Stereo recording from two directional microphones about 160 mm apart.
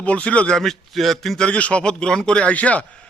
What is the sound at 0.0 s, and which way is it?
Speech, 10° left (ahead or behind).